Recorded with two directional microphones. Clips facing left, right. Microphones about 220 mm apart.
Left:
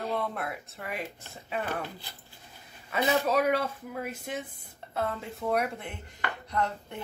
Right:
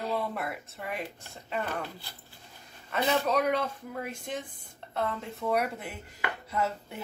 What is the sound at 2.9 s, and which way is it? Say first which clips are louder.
Chopping: left 1 dB; 5° left (ahead or behind).